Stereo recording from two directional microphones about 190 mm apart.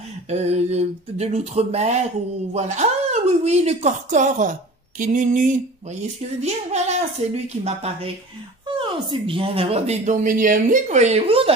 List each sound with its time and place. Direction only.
0.3 s a woman's voice: 35° right (ahead or behind)